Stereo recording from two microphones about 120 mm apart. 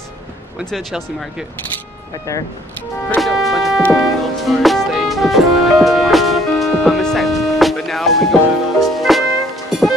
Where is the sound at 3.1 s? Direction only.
Centre (ahead or behind).